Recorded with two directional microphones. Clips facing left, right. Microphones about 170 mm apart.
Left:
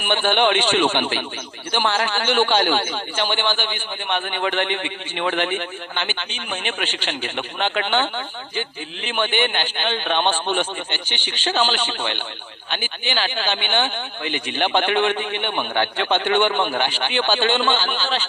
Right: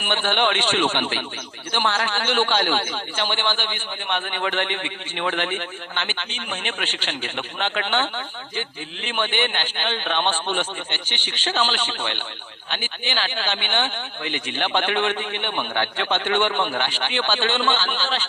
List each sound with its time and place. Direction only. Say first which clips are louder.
0.0 s a man's voice: left 3 dB; 15° left (ahead or behind)